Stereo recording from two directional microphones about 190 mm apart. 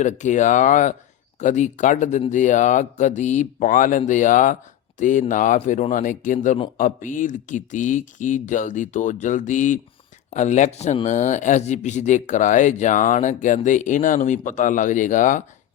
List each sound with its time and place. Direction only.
0.0 s speech: 40° left (ahead or behind)